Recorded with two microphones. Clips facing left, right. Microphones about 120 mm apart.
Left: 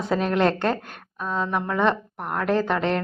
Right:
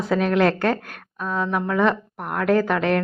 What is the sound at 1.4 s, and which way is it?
Speech, centre (ahead or behind).